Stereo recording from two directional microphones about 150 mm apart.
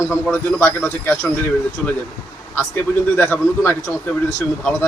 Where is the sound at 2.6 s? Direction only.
15° left (ahead or behind).